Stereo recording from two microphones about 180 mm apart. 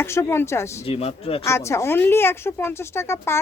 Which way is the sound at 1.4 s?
15° left (ahead or behind).